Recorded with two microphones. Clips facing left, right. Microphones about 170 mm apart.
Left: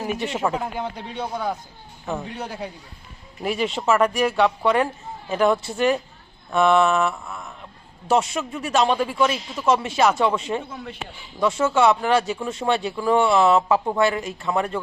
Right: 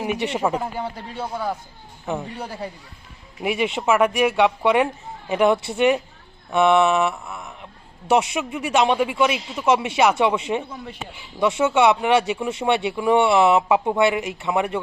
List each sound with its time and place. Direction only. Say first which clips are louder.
0.3 s speech: right 1 dB; 10° right (ahead or behind)
4.4 s speech: right 1 dB; 20° right (ahead or behind)
6.5 s mantra: right 1 dB; 20° right (ahead or behind)
8.4 s speech: right 1 dB; 15° right (ahead or behind)